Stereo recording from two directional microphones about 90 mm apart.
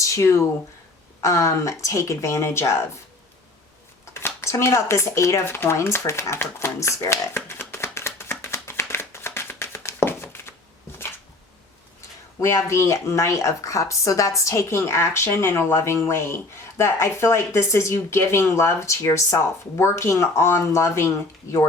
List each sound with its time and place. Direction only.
0.0 s speech: 35° left (ahead or behind)
4.0 s a sound: 30° left (ahead or behind)
12.4 s speech: 35° left (ahead or behind)